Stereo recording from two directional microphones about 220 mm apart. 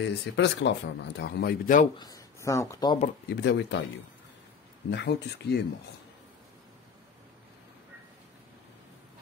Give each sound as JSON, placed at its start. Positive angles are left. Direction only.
{"t": 0.0, "sound": "speech", "side_deg": 50}
{"t": 2.0, "sound": "speech", "side_deg": 15}
{"t": 3.3, "sound": "speech", "side_deg": 50}
{"t": 4.9, "sound": "speech", "side_deg": 50}